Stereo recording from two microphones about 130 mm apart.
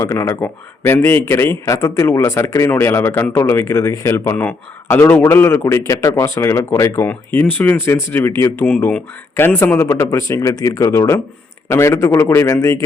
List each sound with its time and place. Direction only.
0.0 s speech: 20° left (ahead or behind)